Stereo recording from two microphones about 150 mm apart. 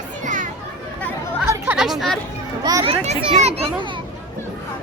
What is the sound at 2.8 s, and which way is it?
Children playing, 45° right (ahead or behind).